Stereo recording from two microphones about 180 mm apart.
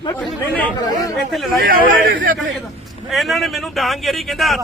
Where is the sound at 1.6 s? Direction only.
55° right (ahead or behind).